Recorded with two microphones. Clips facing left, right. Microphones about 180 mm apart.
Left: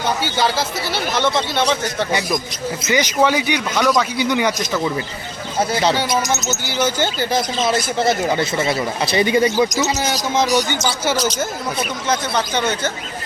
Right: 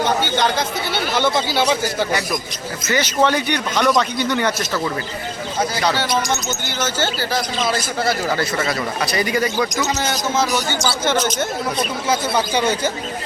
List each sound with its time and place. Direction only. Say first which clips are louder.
0.3 s speech: even; 5° left (ahead or behind)
2.8 s speech: left 1 dB; 15° left (ahead or behind)
5.5 s speech: left 3 dB; 25° left (ahead or behind)
6.5 s speech: left 3 dB; 10° left (ahead or behind)
10.0 s speech: left 1 dB; 15° left (ahead or behind)
11.3 s speech: right 1 dB; centre (ahead or behind)